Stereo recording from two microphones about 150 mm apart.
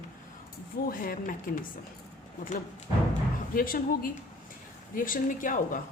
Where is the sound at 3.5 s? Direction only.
70° left (ahead or behind).